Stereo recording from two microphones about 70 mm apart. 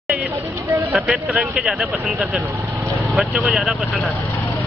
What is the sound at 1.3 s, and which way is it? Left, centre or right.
Speech, centre.